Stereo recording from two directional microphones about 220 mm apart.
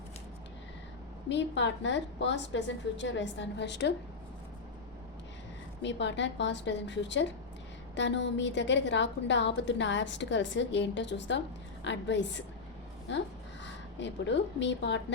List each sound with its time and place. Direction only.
1.3 s a woman's voice: 55° left (ahead or behind)
5.8 s a woman's voice: 55° left (ahead or behind)